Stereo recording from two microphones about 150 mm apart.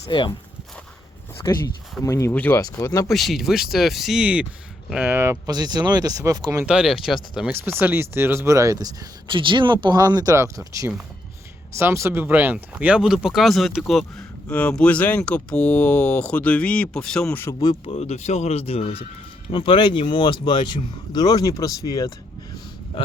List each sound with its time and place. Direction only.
0.0 s speech: 30° left (ahead or behind)
1.4 s speech: 15° left (ahead or behind)
2.6 s speech: 25° left (ahead or behind)
3.1 s speech: centre (ahead or behind); by 6.7 s 20° right (ahead or behind)
6.7 s speech: 5° right (ahead or behind)
7.5 s speech: 15° right (ahead or behind); by 17.5 s 10° left (ahead or behind)
17.8 s speech: 45° left (ahead or behind); by 22.1 s 25° left (ahead or behind)